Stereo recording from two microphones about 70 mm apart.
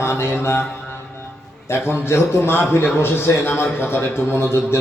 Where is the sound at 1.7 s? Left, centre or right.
Left.